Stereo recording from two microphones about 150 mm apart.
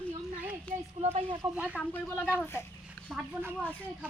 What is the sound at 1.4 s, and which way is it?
Speech, 10° right (ahead or behind).